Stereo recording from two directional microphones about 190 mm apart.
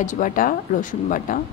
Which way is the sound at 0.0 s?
45° left (ahead or behind).